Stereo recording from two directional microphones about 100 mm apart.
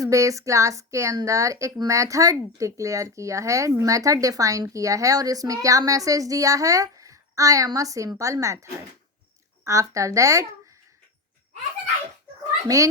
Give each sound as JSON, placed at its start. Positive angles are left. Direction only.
{"t": 0.0, "sound": "speech", "side_deg": -30}
{"t": 12.6, "sound": "speech", "side_deg": -35}